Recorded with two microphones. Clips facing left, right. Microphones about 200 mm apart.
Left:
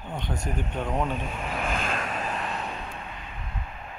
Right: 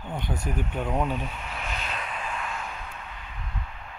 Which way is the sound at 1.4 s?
50° left (ahead or behind).